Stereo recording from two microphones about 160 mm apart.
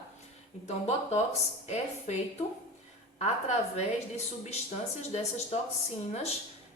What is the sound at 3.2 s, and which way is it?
A woman's voice, 45° left (ahead or behind).